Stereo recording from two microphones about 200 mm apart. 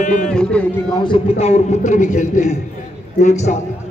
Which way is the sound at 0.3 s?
5° left (ahead or behind).